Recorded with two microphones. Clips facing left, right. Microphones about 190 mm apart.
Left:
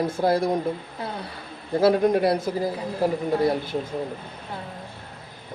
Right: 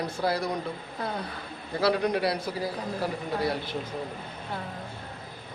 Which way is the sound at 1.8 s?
50° left (ahead or behind).